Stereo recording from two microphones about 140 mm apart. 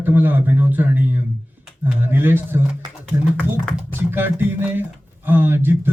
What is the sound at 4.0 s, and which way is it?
A man's voice, 15° right (ahead or behind).